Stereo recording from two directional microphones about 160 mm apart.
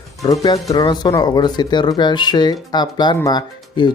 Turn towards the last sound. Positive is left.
turn(degrees=25)  # may be behind; listen again after turning